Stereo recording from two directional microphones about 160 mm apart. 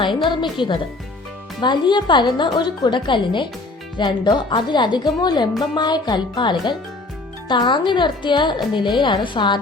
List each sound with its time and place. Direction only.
0.5 s speech: 30° left (ahead or behind)